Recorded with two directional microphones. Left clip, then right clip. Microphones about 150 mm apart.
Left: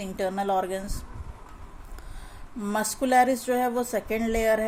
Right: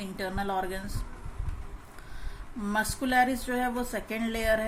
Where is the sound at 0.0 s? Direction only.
60° left (ahead or behind).